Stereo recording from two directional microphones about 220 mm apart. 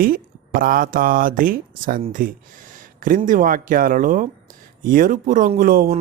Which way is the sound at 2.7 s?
40° right (ahead or behind).